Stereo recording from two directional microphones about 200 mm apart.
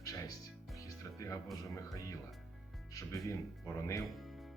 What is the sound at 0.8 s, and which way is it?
Music, 15° left (ahead or behind).